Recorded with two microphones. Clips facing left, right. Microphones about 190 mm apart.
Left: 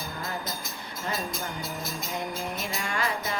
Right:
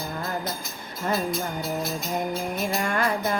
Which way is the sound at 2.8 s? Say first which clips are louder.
Right 5 dB; 50° right (ahead or behind).